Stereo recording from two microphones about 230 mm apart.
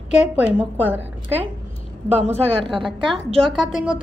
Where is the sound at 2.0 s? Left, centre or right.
Right.